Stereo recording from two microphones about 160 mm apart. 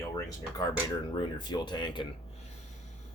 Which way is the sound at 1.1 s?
30° left (ahead or behind).